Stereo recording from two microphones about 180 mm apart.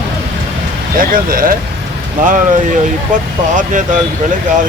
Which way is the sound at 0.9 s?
50° right (ahead or behind).